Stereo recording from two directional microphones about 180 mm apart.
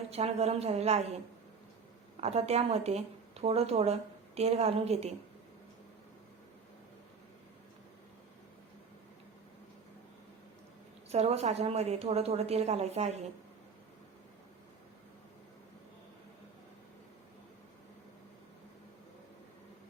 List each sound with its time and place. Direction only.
0.1 s a woman's voice: 35° right (ahead or behind)
2.2 s a woman's voice: 35° right (ahead or behind)
11.1 s a woman's voice: 35° right (ahead or behind)